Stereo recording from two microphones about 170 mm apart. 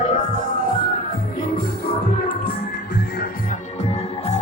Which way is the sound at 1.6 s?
60° left (ahead or behind).